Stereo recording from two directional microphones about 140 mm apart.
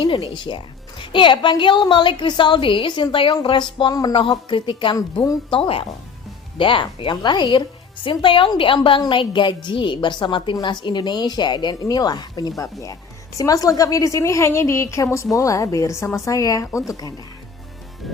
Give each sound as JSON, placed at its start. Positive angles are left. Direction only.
{"t": 0.3, "sound": "a woman's voice", "side_deg": 35}
{"t": 4.9, "sound": "speech", "side_deg": 25}
{"t": 5.5, "sound": "a woman's voice", "side_deg": 40}